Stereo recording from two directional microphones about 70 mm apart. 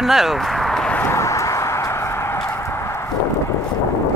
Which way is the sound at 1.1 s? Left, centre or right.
Left.